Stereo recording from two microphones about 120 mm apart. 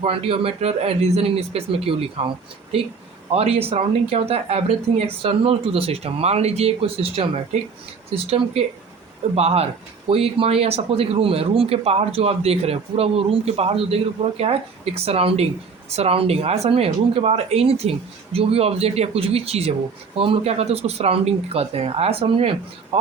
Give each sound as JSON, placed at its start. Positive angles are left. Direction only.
{"t": 0.0, "sound": "speech", "side_deg": -50}